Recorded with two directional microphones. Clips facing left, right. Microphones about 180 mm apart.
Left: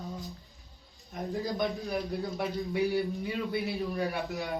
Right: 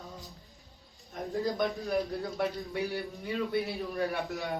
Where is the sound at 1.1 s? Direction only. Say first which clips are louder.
Right 1 dB; centre (ahead or behind).